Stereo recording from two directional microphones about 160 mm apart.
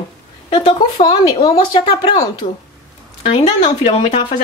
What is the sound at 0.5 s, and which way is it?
Speech, 35° left (ahead or behind).